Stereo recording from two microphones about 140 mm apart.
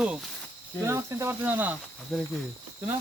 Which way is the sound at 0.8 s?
20° right (ahead or behind).